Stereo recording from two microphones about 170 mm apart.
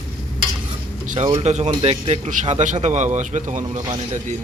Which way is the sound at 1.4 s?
40° right (ahead or behind).